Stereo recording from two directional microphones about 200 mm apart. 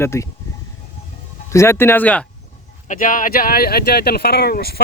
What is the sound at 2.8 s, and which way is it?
Speech, 40° left (ahead or behind).